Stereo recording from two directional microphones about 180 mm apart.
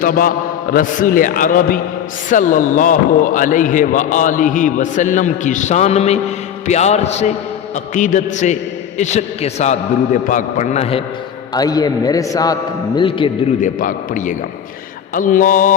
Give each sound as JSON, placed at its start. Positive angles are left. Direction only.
{"t": 0.0, "sound": "a man's voice", "side_deg": 50}
{"t": 11.5, "sound": "a man's voice", "side_deg": 20}
{"t": 13.6, "sound": "a man's voice", "side_deg": 50}